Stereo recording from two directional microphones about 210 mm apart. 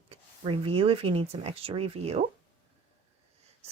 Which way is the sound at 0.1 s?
25° right (ahead or behind).